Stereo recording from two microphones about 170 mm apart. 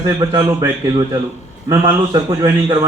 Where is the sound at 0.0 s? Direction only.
20° right (ahead or behind).